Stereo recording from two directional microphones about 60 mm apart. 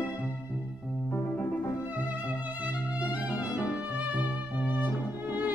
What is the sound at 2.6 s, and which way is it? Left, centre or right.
Music, right.